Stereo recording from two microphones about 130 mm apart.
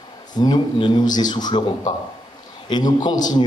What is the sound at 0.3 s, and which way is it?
A man's voice, 30° left (ahead or behind).